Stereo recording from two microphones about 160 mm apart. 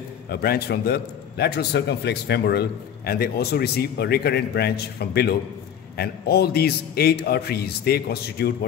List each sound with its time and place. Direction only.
0.3 s a man's voice: 75° left (ahead or behind)
3.1 s a man's voice: 80° left